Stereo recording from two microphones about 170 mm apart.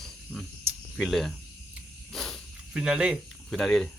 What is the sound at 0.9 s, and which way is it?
Speech, centre (ahead or behind).